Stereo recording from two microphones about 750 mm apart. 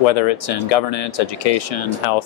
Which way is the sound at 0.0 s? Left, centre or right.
Left.